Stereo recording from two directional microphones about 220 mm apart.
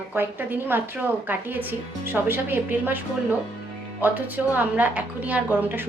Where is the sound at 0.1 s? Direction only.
10° right (ahead or behind).